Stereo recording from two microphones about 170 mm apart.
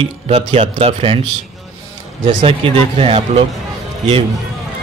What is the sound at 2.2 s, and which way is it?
Speech, 30° right (ahead or behind).